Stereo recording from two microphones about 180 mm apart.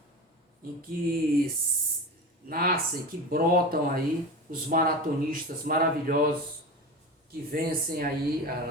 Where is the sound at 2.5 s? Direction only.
55° right (ahead or behind).